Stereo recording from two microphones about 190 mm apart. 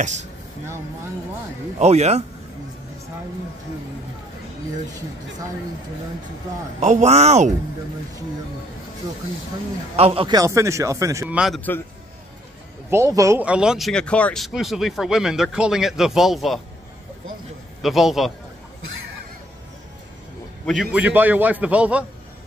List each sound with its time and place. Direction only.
0.0 s speech: 40° right (ahead or behind)
1.8 s speech: 35° right (ahead or behind)
6.8 s speech: 40° right (ahead or behind)
9.9 s a man's voice: 30° right (ahead or behind)
11.3 s speech: centre (ahead or behind)
12.9 s speech: 15° right (ahead or behind); by 16.6 s centre (ahead or behind)
17.8 s speech: centre (ahead or behind)
20.6 s a man's voice: centre (ahead or behind)